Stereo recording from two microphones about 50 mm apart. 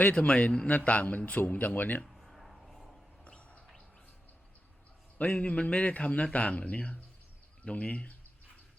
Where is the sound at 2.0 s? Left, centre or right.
Centre.